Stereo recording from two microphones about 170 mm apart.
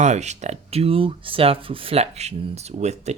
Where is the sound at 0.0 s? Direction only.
40° right (ahead or behind).